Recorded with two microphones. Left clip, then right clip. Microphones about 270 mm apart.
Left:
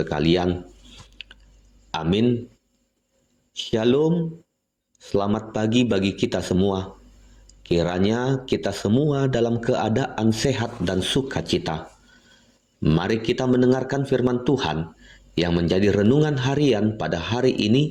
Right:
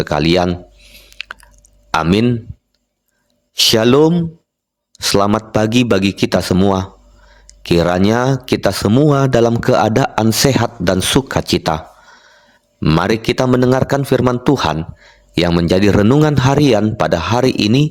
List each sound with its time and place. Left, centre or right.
0.0 s a man's voice: right
1.1 s chewing: right
1.9 s speech: right
3.5 s a man's voice: right
12.8 s a man's voice: right